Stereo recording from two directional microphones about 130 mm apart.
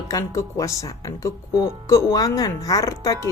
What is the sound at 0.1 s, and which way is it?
Speech, 25° left (ahead or behind).